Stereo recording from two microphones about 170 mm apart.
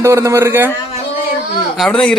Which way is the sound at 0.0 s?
15° right (ahead or behind).